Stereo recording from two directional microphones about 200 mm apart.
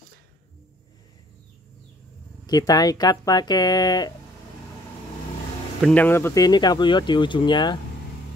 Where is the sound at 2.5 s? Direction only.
20° left (ahead or behind).